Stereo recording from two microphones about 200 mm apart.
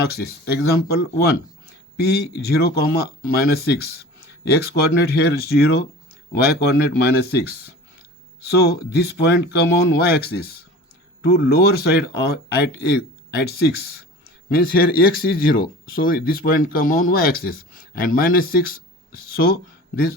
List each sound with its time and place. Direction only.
0.0 s speech: 55° left (ahead or behind)
5.1 s speech: 55° left (ahead or behind)